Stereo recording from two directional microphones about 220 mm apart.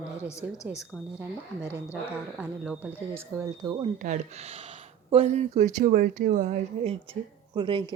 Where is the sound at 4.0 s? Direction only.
30° right (ahead or behind).